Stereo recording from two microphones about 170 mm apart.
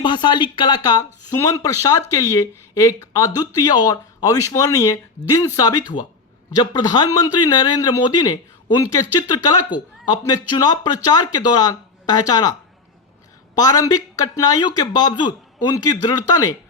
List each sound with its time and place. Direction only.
0.0 s speech: 25° left (ahead or behind)
13.6 s speech: 20° left (ahead or behind)